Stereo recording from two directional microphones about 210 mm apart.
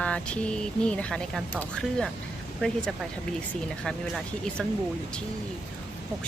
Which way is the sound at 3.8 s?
Centre (ahead or behind).